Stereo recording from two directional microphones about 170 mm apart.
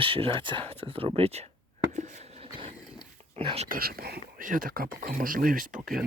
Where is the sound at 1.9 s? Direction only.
40° right (ahead or behind).